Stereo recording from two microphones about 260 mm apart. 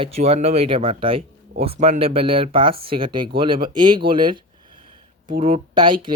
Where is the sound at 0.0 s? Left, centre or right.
Right.